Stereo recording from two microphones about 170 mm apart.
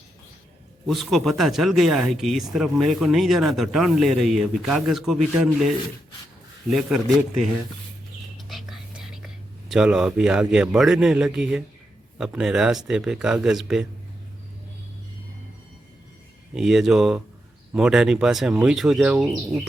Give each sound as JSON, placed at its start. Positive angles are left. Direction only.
{"t": 0.9, "sound": "speech", "side_deg": 0}
{"t": 8.4, "sound": "whispering", "side_deg": 0}
{"t": 12.1, "sound": "speech", "side_deg": -5}
{"t": 16.6, "sound": "speech", "side_deg": 0}